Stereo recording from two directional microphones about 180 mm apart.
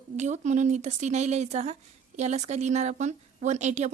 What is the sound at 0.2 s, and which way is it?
A woman's voice, 40° right (ahead or behind).